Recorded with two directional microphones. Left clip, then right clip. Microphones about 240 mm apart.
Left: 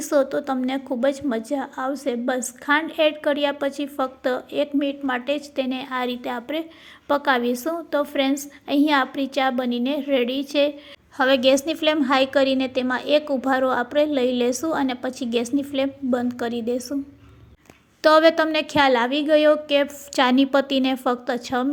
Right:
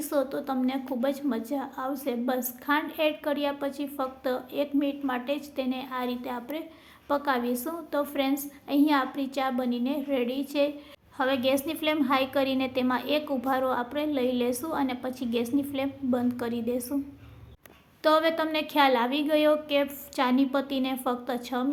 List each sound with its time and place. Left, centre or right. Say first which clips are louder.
0.0 s a woman's voice: left 8 dB; left
18.0 s a woman's voice: left 8 dB; left